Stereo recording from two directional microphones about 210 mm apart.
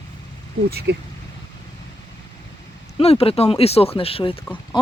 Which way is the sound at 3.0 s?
30° left (ahead or behind).